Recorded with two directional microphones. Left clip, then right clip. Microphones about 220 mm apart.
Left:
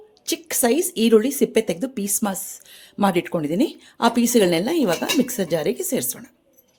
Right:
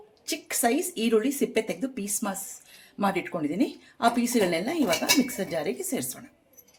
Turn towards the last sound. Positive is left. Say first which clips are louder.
# left 7 dB
turn(degrees=45)  # may be behind; listen again after turning